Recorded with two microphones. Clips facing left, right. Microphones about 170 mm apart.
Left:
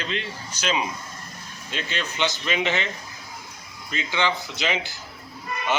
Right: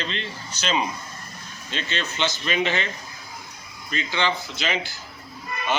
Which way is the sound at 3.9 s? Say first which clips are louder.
Even; 15° left (ahead or behind).